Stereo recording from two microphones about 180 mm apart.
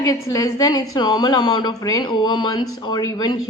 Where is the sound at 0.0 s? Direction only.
20° left (ahead or behind).